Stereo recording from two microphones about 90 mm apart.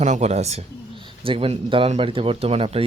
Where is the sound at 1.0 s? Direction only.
85° right.